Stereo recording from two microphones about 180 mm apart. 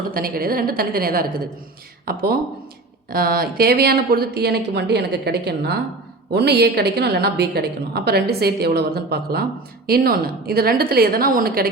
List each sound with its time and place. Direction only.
0.1 s a woman's voice: 55° right (ahead or behind)